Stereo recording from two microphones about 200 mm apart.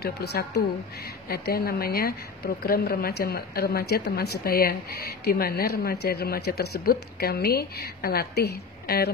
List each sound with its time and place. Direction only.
0.0 s a woman's voice: 55° left (ahead or behind)